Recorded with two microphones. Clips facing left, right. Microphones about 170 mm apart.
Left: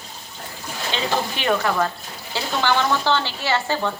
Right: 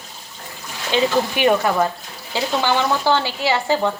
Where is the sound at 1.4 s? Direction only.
20° right (ahead or behind).